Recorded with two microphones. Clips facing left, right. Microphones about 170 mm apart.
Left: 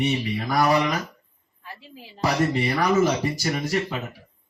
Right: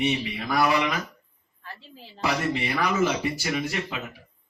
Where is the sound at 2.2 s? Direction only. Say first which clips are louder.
Left 4 dB; 40° left (ahead or behind).